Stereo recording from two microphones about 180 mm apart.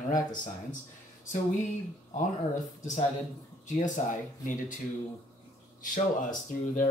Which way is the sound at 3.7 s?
45° left (ahead or behind).